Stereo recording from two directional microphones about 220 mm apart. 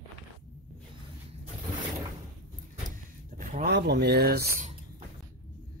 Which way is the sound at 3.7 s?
50° right (ahead or behind).